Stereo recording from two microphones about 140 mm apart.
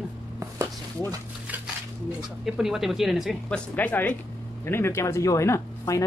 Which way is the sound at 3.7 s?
10° left (ahead or behind).